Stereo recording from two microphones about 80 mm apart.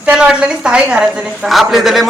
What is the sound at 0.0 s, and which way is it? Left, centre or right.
A man's voice, centre.